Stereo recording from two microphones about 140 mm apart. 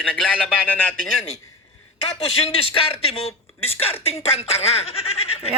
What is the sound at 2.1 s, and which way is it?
A man's voice, 45° left (ahead or behind).